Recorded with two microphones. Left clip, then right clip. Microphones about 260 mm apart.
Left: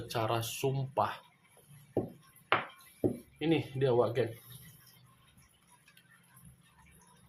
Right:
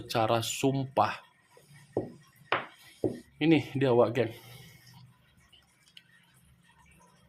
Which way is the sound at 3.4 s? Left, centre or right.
Right.